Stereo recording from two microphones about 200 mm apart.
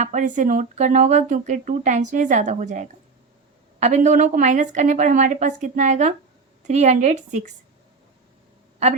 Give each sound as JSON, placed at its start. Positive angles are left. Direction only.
{"t": 0.0, "sound": "speech", "side_deg": -40}